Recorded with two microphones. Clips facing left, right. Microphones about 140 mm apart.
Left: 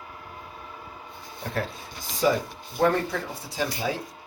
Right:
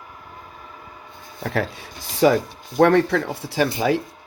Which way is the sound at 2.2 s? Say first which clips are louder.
Right 7 dB; 75° right (ahead or behind).